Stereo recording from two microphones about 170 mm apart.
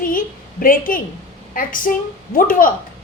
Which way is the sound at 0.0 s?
55° left (ahead or behind).